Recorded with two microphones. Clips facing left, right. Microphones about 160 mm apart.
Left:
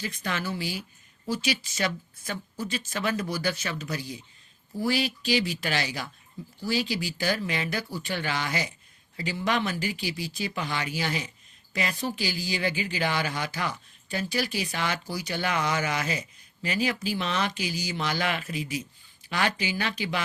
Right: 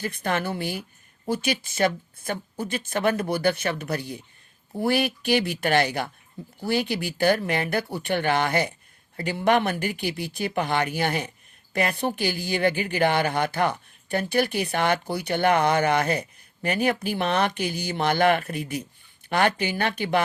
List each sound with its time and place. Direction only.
0.0 s speech: 55° right (ahead or behind)